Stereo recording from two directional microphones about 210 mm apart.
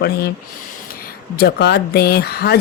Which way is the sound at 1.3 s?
50° left (ahead or behind).